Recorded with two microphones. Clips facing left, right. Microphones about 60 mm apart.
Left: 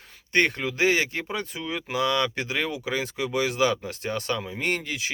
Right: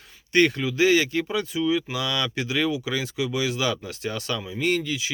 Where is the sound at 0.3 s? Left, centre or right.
Left.